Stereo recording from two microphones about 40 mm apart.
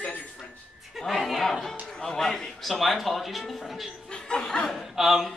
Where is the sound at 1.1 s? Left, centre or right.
Centre.